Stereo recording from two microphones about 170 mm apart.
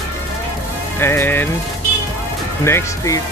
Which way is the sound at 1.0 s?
15° left (ahead or behind).